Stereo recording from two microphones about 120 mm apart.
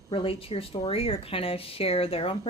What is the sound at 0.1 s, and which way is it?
A woman's voice, 50° left (ahead or behind).